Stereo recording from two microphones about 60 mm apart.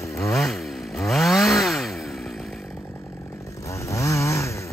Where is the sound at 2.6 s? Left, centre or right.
Left.